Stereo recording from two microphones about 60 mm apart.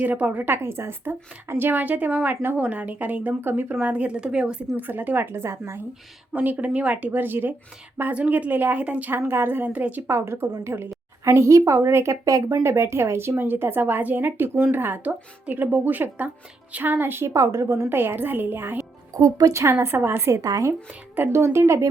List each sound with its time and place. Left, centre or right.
0.0 s a woman's voice: right
2.6 s speech: right
4.8 s a woman's voice: right
6.3 s speech: right
8.1 s speech: right
10.1 s a woman's voice: right
12.2 s a woman's voice: right
12.6 s a woman's voice: right
17.2 s a woman's voice: right
17.8 s a woman's voice: right
19.1 s speech: right
19.8 s a woman's voice: right
20.4 s speech: right
21.2 s a woman's voice: right